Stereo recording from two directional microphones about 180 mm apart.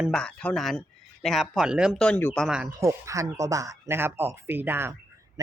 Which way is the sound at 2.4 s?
5° right (ahead or behind).